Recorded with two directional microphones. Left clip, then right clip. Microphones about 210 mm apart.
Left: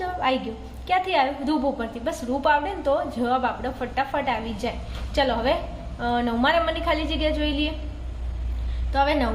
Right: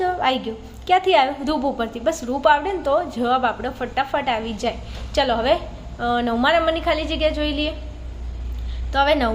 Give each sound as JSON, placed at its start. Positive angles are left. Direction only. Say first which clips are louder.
{"t": 0.0, "sound": "a sound", "louder": "right 4 dB", "side_deg": -30}
{"t": 0.9, "sound": "a woman's voice", "louder": "right 5 dB", "side_deg": -30}
{"t": 8.9, "sound": "a woman's voice", "louder": "right 4 dB", "side_deg": -30}